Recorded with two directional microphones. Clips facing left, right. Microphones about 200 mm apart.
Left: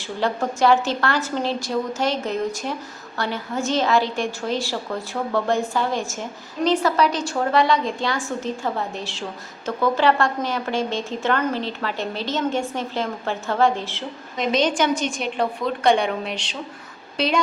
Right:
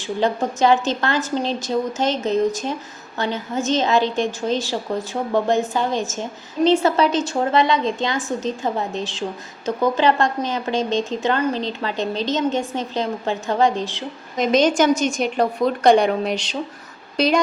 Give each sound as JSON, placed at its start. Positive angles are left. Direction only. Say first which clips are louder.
{"t": 0.0, "sound": "speech", "louder": "right 3 dB", "side_deg": -20}
{"t": 14.3, "sound": "a woman's voice", "louder": "right 4 dB", "side_deg": -45}